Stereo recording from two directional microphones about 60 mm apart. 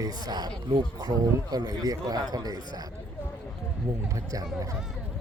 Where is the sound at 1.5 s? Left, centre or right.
Right.